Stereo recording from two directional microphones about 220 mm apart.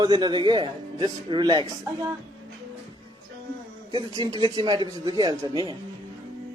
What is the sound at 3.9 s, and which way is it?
Speech, 20° right (ahead or behind).